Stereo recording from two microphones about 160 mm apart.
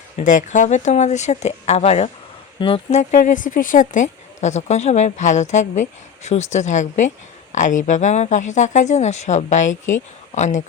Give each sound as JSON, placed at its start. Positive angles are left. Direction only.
{"t": 0.2, "sound": "speech", "side_deg": 50}